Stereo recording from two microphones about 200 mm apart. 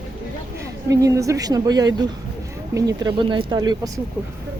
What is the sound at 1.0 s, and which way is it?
Speech, 15° right (ahead or behind).